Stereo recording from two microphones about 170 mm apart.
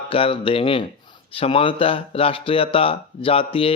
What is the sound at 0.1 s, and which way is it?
Speech, 30° left (ahead or behind).